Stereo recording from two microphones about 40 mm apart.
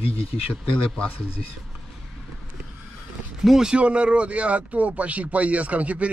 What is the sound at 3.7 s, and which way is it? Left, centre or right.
Speech, right.